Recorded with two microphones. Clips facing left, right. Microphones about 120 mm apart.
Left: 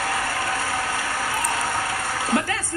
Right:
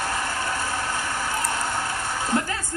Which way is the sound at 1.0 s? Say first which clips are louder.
Left 1 dB; 5° left (ahead or behind).